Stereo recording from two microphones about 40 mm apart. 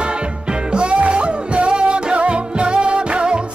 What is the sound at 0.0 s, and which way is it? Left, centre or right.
Music, right.